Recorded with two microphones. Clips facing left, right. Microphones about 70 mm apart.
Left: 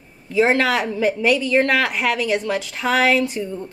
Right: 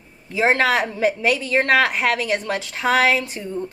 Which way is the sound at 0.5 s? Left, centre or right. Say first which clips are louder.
Even; right.